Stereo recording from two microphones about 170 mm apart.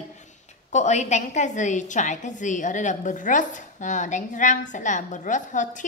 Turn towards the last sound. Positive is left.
turn(degrees=45)  # may be behind; listen again after turning